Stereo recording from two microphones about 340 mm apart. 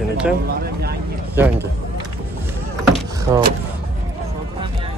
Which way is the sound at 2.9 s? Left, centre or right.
Centre.